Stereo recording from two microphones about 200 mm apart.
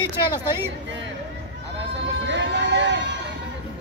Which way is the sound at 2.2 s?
60° right (ahead or behind).